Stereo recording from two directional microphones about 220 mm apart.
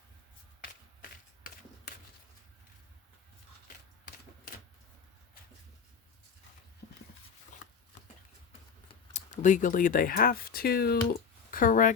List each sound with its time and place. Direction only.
1.5 s a sound: 40° left (ahead or behind)
6.8 s clip-clop: 35° left (ahead or behind)
9.1 s speech: 35° left (ahead or behind)